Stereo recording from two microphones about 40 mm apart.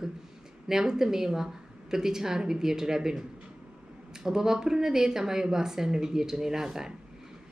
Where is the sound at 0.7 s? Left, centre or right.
Centre.